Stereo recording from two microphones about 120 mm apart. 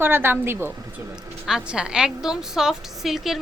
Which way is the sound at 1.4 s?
5° right (ahead or behind).